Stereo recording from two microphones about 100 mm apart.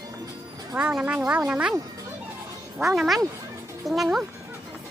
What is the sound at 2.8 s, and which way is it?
Speech, centre (ahead or behind).